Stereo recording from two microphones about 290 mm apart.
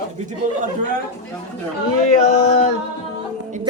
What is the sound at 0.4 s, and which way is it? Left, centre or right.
Speech, right.